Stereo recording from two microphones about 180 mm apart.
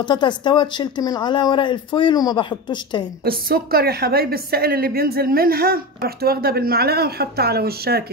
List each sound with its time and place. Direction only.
0.0 s speech: 25° left (ahead or behind)
3.3 s a woman's voice: 55° right (ahead or behind)